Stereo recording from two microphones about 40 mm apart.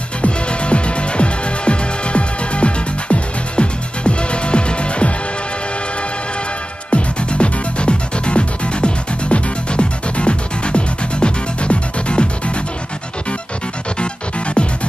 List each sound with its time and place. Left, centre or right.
0.2 s music: left
6.9 s music: left